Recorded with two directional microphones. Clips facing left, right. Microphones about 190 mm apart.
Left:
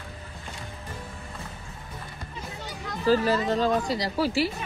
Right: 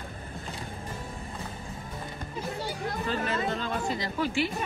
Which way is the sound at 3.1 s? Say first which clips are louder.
Left 9 dB; 35° left (ahead or behind).